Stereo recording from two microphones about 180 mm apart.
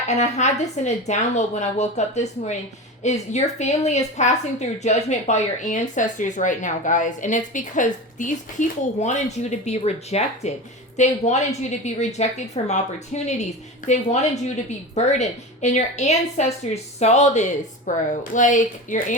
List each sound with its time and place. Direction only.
0.1 s a woman's voice: 40° left (ahead or behind)